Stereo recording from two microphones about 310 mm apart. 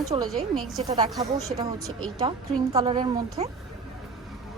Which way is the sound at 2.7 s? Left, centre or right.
Centre.